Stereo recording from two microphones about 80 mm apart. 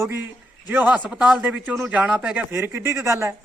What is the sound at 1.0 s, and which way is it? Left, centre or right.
Speech, centre.